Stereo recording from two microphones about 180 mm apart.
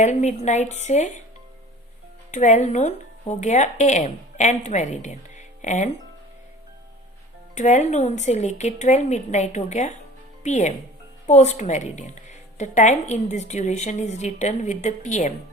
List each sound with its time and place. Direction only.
0.0 s a woman's voice: 40° left (ahead or behind)
2.3 s speech: 40° left (ahead or behind)
7.5 s a woman's voice: 45° left (ahead or behind)